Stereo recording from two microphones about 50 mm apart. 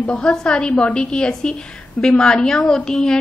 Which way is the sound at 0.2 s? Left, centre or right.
Centre.